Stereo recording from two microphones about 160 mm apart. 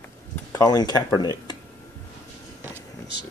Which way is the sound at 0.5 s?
25° left (ahead or behind).